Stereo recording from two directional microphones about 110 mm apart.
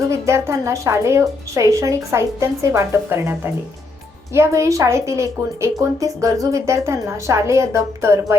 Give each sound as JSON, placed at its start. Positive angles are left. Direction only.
{"t": 0.1, "sound": "a woman's voice", "side_deg": -25}